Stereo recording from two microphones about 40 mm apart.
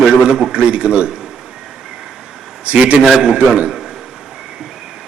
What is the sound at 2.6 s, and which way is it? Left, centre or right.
Speech, right.